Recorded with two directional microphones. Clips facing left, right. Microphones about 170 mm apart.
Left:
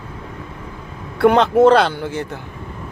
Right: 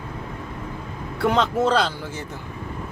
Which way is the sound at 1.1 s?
60° left (ahead or behind).